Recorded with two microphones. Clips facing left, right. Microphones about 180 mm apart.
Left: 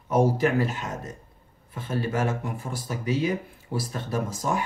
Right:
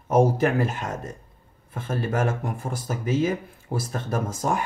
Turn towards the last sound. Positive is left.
turn(degrees=-50)  # may be behind; listen again after turning